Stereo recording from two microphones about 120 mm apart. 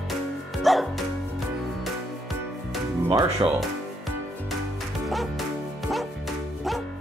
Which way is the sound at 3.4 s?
40° right (ahead or behind).